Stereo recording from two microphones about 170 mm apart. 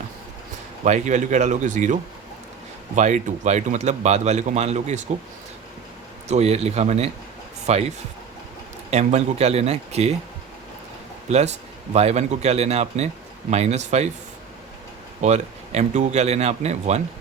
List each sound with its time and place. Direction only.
0.9 s a man's voice: 45° right (ahead or behind)
6.2 s speech: 40° right (ahead or behind)
11.3 s speech: 40° right (ahead or behind)
15.2 s speech: 40° right (ahead or behind)